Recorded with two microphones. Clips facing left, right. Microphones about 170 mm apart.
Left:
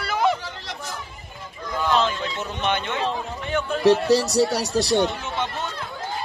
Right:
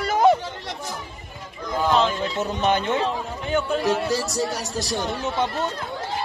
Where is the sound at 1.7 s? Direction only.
20° right (ahead or behind).